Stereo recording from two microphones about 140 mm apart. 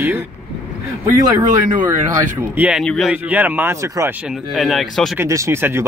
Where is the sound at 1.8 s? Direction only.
15° right (ahead or behind).